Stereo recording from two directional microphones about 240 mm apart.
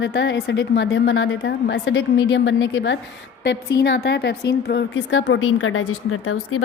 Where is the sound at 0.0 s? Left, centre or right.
Left.